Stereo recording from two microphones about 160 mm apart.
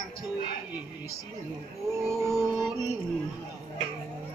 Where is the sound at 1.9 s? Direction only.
15° right (ahead or behind).